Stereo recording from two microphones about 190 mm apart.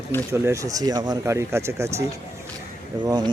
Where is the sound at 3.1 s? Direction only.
20° right (ahead or behind).